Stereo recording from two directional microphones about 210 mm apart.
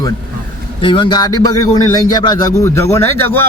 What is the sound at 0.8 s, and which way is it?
A man's voice, 25° left (ahead or behind).